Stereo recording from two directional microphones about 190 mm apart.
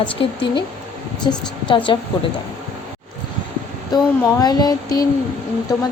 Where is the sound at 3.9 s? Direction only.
20° left (ahead or behind).